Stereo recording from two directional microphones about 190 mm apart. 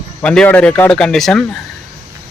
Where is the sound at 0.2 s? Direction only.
5° left (ahead or behind).